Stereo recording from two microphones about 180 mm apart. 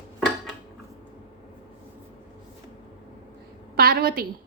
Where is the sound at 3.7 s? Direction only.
55° right (ahead or behind).